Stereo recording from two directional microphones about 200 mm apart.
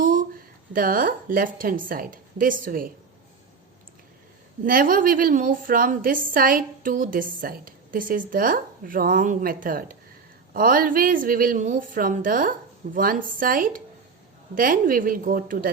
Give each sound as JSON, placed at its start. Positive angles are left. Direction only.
{"t": 0.0, "sound": "a sound", "side_deg": -40}
{"t": 0.7, "sound": "a woman's voice", "side_deg": -45}
{"t": 4.6, "sound": "a woman's voice", "side_deg": -45}